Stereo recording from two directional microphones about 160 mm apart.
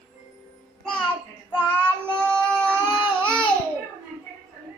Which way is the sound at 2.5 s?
5° left (ahead or behind).